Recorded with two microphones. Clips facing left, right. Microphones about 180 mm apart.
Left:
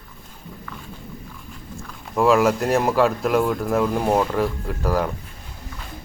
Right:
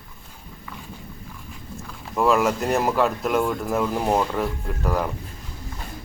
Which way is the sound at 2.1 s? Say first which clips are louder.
Left 3 dB; centre (ahead or behind).